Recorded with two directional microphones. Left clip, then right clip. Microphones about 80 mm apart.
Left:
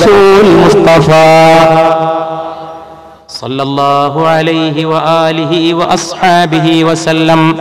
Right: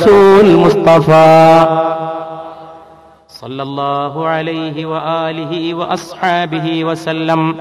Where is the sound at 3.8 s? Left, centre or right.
Right.